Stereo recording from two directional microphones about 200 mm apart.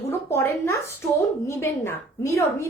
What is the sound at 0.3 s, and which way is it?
A woman's voice, 10° left (ahead or behind).